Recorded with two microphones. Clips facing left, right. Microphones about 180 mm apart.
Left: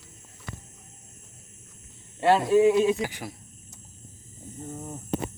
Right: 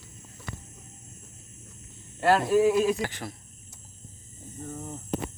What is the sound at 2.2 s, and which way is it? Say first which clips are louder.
Speech: left 2 dB; centre (ahead or behind).